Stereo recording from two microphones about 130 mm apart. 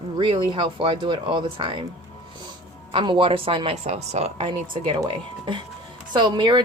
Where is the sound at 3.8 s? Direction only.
55° right (ahead or behind).